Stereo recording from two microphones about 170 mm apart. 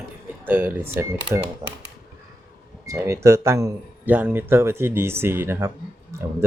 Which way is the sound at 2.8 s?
20° right (ahead or behind).